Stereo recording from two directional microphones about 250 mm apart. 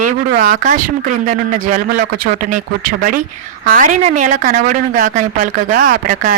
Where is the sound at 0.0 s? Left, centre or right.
Right.